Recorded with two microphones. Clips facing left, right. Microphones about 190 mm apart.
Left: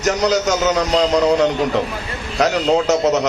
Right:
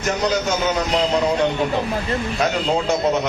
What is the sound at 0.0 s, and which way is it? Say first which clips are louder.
Speech: left 4 dB; 75° left (ahead or behind).